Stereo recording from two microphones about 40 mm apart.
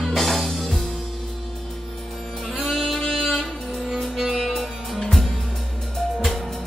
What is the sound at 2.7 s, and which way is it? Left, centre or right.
Music, centre.